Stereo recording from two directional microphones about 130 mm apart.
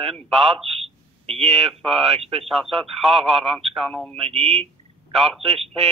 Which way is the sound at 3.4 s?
Centre (ahead or behind).